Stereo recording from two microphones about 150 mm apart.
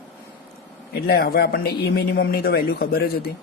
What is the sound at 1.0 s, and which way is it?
Speech, 90° left.